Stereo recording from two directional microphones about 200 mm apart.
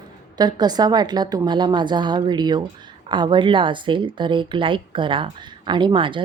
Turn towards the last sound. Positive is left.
turn(degrees=-25)  # may be behind; listen again after turning